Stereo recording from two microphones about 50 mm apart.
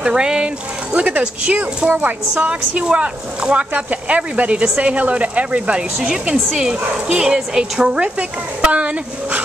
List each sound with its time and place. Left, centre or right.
0.0 s speech: centre